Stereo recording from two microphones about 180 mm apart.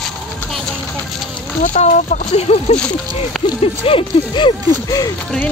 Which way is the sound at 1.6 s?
45° left (ahead or behind).